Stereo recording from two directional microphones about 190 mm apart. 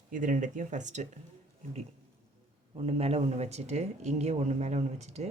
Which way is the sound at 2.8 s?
30° right (ahead or behind).